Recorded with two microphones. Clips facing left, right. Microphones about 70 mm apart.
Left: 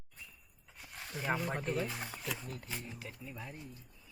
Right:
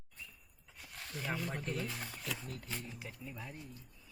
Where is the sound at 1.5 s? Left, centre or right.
Left.